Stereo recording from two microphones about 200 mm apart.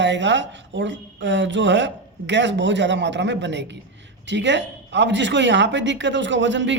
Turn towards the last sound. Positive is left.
turn(degrees=-65)  # may be behind; listen again after turning